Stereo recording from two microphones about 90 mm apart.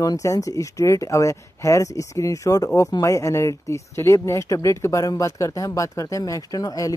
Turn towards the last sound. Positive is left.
turn(degrees=45)  # may be behind; listen again after turning